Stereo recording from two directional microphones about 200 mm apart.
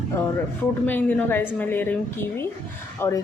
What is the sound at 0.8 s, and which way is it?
A woman's voice, 10° left (ahead or behind).